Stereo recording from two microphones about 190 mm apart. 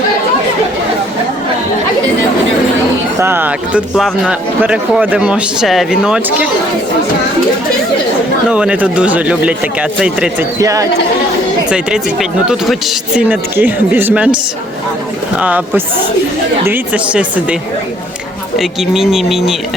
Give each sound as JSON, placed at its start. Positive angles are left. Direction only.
{"t": 3.2, "sound": "speech", "side_deg": -10}
{"t": 8.4, "sound": "speech", "side_deg": -5}
{"t": 10.6, "sound": "speech", "side_deg": -15}
{"t": 13.1, "sound": "speech", "side_deg": -10}
{"t": 15.4, "sound": "speech", "side_deg": -10}